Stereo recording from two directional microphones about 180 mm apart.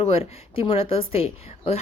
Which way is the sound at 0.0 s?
30° left (ahead or behind).